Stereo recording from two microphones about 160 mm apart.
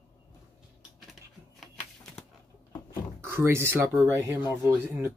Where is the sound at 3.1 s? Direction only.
15° right (ahead or behind).